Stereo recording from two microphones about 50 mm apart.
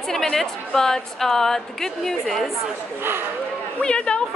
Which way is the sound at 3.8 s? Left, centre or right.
Centre.